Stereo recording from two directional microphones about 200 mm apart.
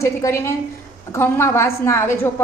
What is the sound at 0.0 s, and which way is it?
A woman's voice, 15° left (ahead or behind).